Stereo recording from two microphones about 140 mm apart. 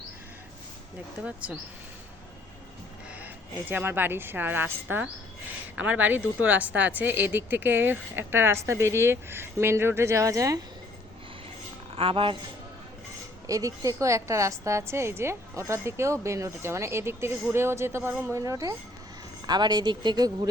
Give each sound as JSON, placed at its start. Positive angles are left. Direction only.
{"t": 1.2, "sound": "a woman's voice", "side_deg": -10}
{"t": 3.7, "sound": "a woman's voice", "side_deg": -15}
{"t": 11.9, "sound": "a woman's voice", "side_deg": -40}
{"t": 13.5, "sound": "a woman's voice", "side_deg": -25}